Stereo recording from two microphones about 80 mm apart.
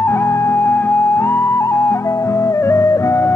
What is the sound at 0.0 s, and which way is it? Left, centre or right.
Music, left.